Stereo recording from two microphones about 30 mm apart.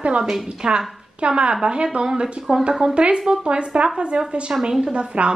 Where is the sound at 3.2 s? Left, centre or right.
Right.